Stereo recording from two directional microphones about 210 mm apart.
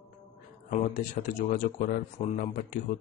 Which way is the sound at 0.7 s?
35° left (ahead or behind).